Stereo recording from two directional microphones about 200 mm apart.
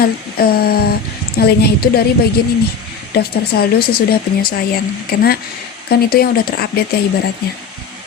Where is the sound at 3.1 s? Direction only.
50° left (ahead or behind).